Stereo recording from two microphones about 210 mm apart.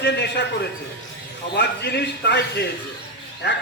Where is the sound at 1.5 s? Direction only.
55° left (ahead or behind).